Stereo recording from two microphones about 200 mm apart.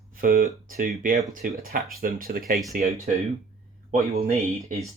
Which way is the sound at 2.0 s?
45° right (ahead or behind).